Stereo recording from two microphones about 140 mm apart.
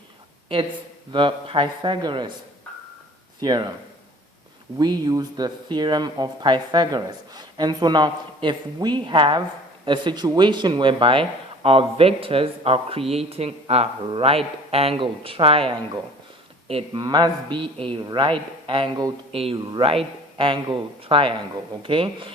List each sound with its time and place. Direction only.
1.1 s speech: 40° right (ahead or behind)
3.4 s speech: 30° right (ahead or behind)
4.8 s speech: 30° right (ahead or behind)
17.0 s speech: 30° right (ahead or behind)